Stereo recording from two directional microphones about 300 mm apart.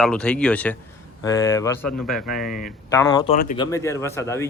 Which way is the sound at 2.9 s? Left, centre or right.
Centre.